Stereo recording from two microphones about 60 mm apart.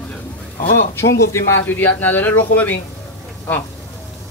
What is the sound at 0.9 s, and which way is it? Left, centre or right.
Speech, left.